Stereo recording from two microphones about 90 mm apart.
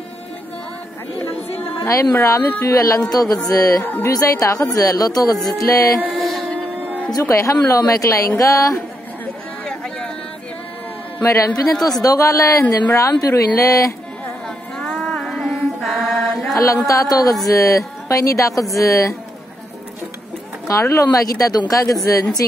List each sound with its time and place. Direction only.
1.9 s speech: 35° left (ahead or behind)
3.8 s speech: 20° left (ahead or behind)
4.1 s speech: 40° left (ahead or behind)
6.1 s music: centre (ahead or behind)
7.1 s speech: 40° left (ahead or behind)
9.7 s a sound: 10° left (ahead or behind)
11.8 s speech: 40° left (ahead or behind)
14.8 s mantra: 10° left (ahead or behind)
16.5 s speech: 40° left (ahead or behind)
20.6 s speech: 35° left (ahead or behind)